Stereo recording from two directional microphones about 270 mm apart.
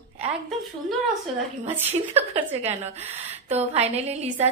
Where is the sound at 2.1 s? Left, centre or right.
Right.